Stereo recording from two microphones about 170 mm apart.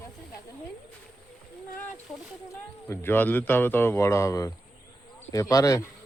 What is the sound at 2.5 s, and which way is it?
Speech, 15° left (ahead or behind).